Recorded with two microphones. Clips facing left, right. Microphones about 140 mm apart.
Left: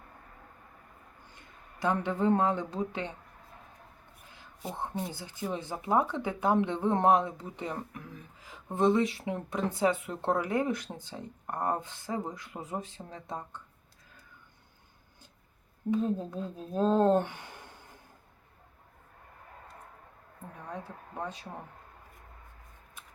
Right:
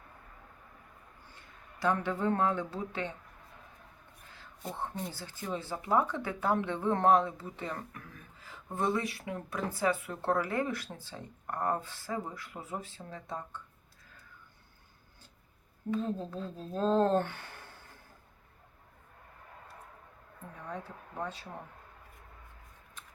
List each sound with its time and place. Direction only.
1.8 s speech: 20° left (ahead or behind)
4.8 s speech: 15° left (ahead or behind)
15.9 s speech: 15° left (ahead or behind)
21.2 s speech: 15° left (ahead or behind)
23.0 s a sound: 10° left (ahead or behind)